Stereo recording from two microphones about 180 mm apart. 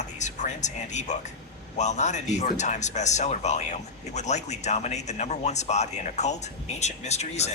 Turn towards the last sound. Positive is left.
turn(degrees=40)  # may be behind; listen again after turning